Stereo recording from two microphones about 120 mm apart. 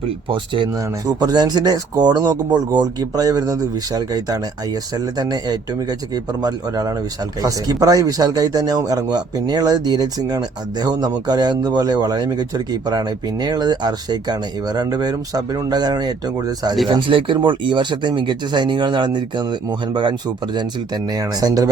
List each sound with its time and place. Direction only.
0.3 s speech: 45° right (ahead or behind)
1.0 s a man's voice: 35° right (ahead or behind)
16.9 s a man's voice: 45° right (ahead or behind)